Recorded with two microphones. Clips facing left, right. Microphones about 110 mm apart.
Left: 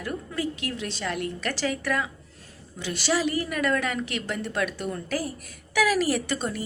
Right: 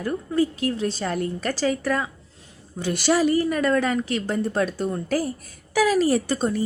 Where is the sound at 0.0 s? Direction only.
35° right (ahead or behind).